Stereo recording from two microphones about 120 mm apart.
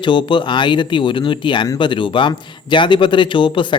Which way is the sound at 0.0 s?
40° left (ahead or behind).